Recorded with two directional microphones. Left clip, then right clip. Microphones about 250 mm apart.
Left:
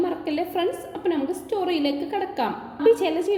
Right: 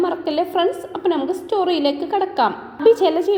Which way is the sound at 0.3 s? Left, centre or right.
Centre.